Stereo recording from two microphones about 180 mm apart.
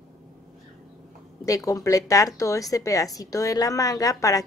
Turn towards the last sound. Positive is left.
turn(degrees=20)  # may be behind; listen again after turning